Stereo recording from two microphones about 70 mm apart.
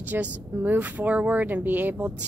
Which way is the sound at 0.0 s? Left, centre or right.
Right.